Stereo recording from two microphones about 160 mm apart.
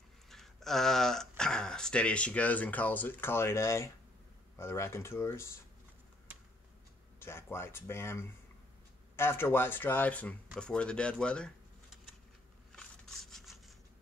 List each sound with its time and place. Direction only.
0.3 s speech: centre (ahead or behind)
7.2 s speech: 15° left (ahead or behind)
12.7 s a sound: centre (ahead or behind)